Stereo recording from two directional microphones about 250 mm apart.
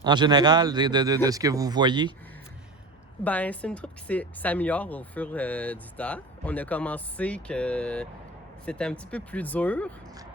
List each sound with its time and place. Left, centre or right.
0.0 s a man's voice: centre
3.2 s a woman's voice: centre